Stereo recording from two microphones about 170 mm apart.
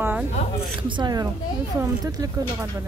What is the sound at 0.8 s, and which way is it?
Speech, 30° right (ahead or behind).